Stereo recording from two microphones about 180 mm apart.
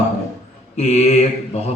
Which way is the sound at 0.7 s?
40° left (ahead or behind).